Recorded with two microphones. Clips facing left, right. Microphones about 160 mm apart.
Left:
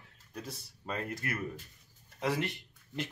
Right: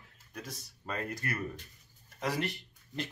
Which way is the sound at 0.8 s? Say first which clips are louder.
Even; 20° left (ahead or behind).